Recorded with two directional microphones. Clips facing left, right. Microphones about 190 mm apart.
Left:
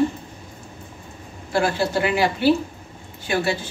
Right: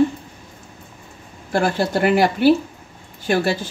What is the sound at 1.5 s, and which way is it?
A woman's voice, 50° right (ahead or behind).